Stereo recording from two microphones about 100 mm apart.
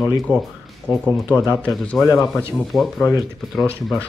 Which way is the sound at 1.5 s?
10° left (ahead or behind).